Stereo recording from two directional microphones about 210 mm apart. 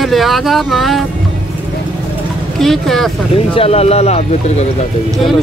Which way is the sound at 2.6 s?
Centre (ahead or behind).